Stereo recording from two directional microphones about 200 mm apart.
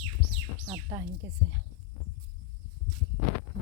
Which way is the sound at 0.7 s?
15° right (ahead or behind).